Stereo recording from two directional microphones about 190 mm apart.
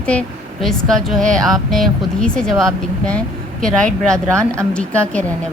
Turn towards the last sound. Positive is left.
turn(degrees=5)  # may be behind; listen again after turning